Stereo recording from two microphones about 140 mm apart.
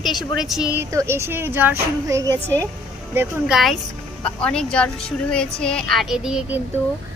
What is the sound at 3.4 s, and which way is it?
A woman's voice, centre (ahead or behind).